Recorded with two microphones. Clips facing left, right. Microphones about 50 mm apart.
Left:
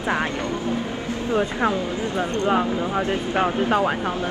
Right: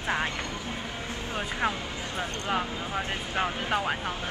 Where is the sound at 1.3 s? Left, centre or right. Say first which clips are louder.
Left 8 dB; left.